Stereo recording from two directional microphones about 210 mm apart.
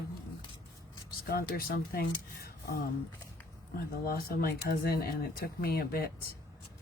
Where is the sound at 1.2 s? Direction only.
45° left (ahead or behind).